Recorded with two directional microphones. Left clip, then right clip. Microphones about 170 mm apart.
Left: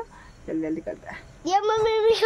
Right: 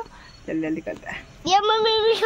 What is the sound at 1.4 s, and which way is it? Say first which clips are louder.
Speech: right 3 dB; 15° left (ahead or behind).